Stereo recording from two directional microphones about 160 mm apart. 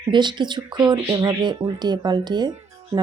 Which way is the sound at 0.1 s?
30° right (ahead or behind).